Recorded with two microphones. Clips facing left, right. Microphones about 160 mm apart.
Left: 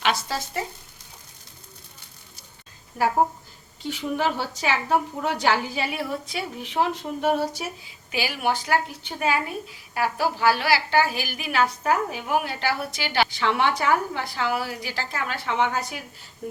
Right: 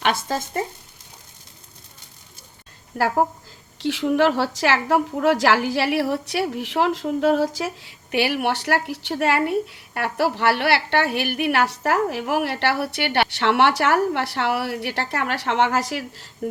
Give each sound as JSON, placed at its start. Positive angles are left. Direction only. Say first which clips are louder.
{"t": 0.0, "sound": "speech", "louder": "right 3 dB", "side_deg": -50}
{"t": 2.9, "sound": "a woman's voice", "louder": "right 1 dB", "side_deg": -65}
{"t": 3.8, "sound": "a woman's voice", "louder": "right 8 dB", "side_deg": -90}